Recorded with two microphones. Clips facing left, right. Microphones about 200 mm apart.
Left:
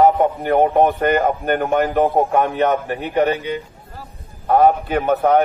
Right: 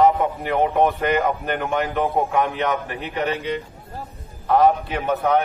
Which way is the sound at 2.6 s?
35° left (ahead or behind).